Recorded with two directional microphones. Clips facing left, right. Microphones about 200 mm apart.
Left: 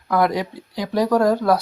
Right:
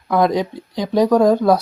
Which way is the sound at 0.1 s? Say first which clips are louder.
Right 3 dB; 20° right (ahead or behind).